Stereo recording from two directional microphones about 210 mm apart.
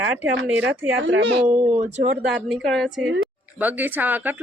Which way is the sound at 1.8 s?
30° right (ahead or behind).